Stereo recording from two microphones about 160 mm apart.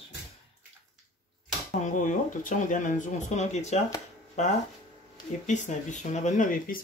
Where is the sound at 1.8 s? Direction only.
50° left (ahead or behind).